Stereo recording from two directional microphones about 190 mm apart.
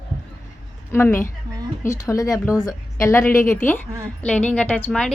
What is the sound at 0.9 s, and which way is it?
A woman's voice, 10° left (ahead or behind).